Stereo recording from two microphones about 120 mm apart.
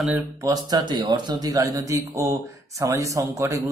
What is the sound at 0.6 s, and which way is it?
A man's voice, 35° right (ahead or behind).